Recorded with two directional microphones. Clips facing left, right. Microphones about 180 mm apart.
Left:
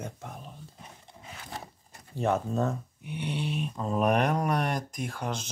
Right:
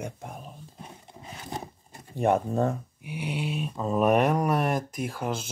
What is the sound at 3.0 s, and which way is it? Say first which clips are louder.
Speech: right 1 dB; 10° right (ahead or behind).